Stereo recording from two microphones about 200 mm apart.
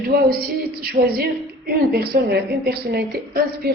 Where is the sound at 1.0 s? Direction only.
50° right (ahead or behind).